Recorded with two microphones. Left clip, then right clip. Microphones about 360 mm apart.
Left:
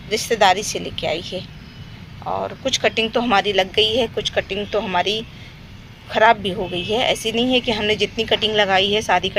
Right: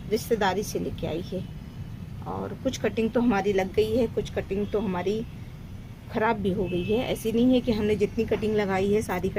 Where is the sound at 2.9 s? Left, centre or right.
Left.